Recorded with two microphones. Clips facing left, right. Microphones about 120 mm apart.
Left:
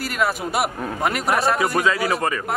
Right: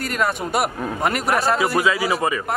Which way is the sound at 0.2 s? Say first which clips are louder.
Even; centre (ahead or behind).